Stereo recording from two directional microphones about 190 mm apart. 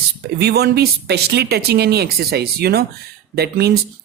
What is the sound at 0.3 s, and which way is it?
Speech, 55° right (ahead or behind).